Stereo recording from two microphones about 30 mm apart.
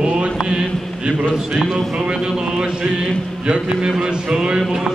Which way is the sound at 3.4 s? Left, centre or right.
Right.